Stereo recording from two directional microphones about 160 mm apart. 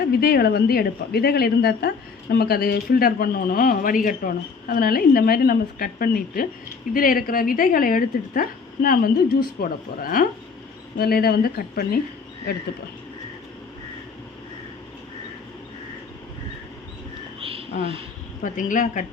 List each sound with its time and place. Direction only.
0.0 s speech: 70° left (ahead or behind)
18.4 s speech: 55° left (ahead or behind)